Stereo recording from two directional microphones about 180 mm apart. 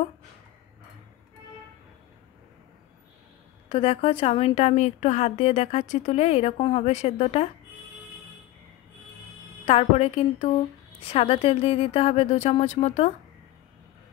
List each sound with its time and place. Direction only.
3.6 s a woman's voice: 30° left (ahead or behind)
9.7 s a woman's voice: 35° left (ahead or behind)